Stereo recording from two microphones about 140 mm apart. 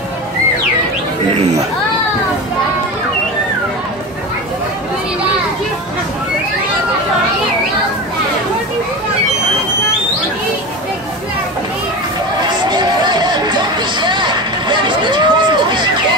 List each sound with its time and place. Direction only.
12.6 s music: 30° right (ahead or behind)